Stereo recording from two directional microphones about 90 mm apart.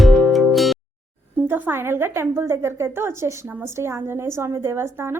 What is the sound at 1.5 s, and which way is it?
A woman's voice, 20° right (ahead or behind).